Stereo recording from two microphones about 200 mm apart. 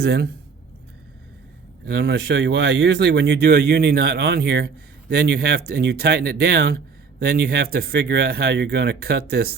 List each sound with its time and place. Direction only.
0.0 s speech: 55° right (ahead or behind)
1.8 s speech: 55° right (ahead or behind)